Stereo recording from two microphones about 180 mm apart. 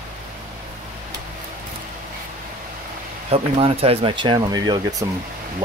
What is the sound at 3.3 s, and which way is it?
Speech, 35° right (ahead or behind).